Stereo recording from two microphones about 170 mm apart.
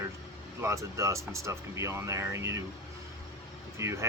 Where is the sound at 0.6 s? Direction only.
15° right (ahead or behind).